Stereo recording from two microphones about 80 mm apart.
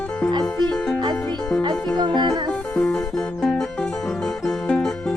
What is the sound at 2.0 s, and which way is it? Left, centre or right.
Music, right.